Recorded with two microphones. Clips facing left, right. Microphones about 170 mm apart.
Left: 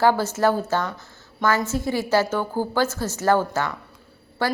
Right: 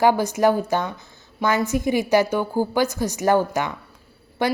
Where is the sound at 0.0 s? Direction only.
15° right (ahead or behind).